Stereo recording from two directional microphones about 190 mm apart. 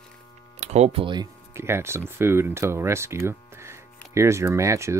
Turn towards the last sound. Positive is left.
turn(degrees=-15)  # may be behind; listen again after turning